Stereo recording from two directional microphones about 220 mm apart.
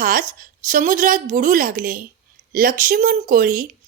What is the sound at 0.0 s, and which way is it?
Speech, 40° right (ahead or behind).